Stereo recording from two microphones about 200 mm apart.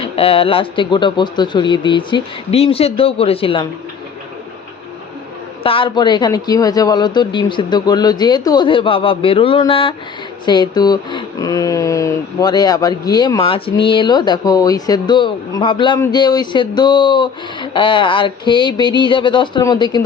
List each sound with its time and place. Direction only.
0.0 s speech: 30° left (ahead or behind)
5.6 s speech: 25° left (ahead or behind)